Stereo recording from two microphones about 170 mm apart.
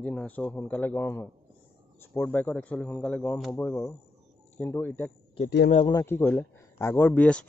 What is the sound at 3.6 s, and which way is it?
A man's voice, 20° left (ahead or behind).